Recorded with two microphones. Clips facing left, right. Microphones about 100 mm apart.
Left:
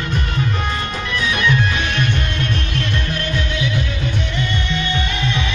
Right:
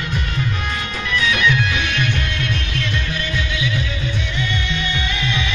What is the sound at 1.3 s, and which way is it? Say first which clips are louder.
Music: left 2 dB; 40° left (ahead or behind).